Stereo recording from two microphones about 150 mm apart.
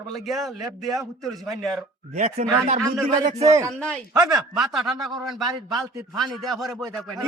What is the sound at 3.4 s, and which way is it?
Speech, 20° right (ahead or behind).